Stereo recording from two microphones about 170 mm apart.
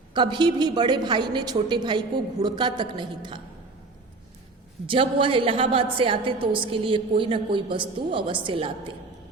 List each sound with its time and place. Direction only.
0.1 s a woman's voice: 25° right (ahead or behind)
4.9 s a woman's voice: 30° right (ahead or behind)